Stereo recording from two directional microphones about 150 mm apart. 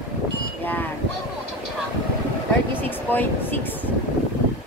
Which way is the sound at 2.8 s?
10° left (ahead or behind).